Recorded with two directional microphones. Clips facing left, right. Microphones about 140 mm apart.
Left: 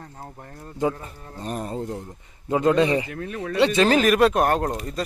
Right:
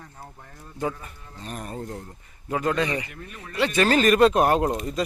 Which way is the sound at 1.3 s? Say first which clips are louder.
Left 6 dB; 40° left (ahead or behind).